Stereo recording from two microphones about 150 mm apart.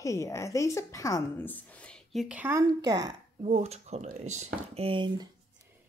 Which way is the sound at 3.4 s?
45° right (ahead or behind).